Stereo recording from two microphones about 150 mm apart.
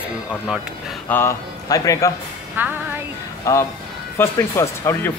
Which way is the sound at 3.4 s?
20° left (ahead or behind).